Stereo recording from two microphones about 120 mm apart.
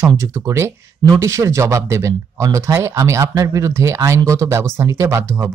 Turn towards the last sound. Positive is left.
turn(degrees=-25)  # may be behind; listen again after turning